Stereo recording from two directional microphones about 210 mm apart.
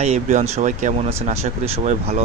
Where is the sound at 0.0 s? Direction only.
30° right (ahead or behind).